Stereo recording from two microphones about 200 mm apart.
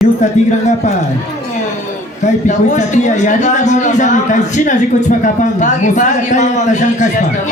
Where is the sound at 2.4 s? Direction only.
35° left (ahead or behind).